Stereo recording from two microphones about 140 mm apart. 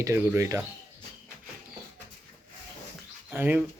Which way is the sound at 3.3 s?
10° right (ahead or behind).